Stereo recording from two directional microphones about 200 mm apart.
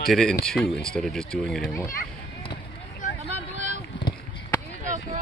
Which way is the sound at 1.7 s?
15° left (ahead or behind).